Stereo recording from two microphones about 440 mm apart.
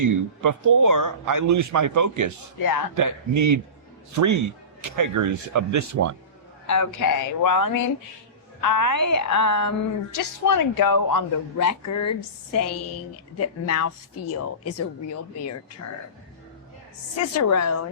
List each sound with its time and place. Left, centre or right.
0.0 s speech: right
6.7 s a woman's voice: left
17.3 s a woman's voice: left